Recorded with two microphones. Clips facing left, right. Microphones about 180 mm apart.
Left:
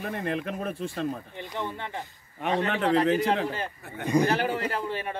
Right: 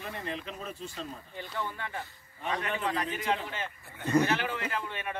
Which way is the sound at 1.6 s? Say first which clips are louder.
Left 3 dB; 20° left (ahead or behind).